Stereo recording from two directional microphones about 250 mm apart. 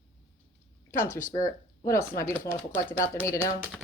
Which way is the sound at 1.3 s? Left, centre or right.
Left.